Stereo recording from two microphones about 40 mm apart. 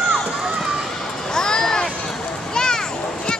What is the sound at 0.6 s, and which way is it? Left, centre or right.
Run, centre.